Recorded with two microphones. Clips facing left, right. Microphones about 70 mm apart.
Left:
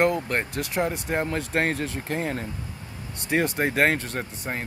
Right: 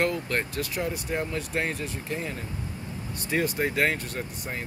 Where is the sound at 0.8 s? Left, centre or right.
Left.